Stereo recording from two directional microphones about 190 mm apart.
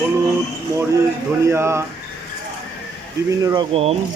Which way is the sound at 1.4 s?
15° right (ahead or behind).